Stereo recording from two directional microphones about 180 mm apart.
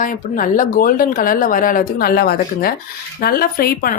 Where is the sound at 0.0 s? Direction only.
50° left (ahead or behind).